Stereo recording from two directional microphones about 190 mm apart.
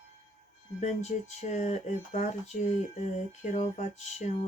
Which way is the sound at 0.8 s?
35° left (ahead or behind).